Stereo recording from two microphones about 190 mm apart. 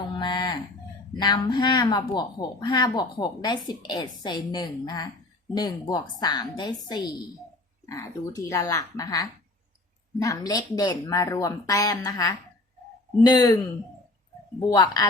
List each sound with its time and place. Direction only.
0.2 s chicken: 25° left (ahead or behind)
1.2 s speech: 20° left (ahead or behind)
14.7 s speech: 20° left (ahead or behind)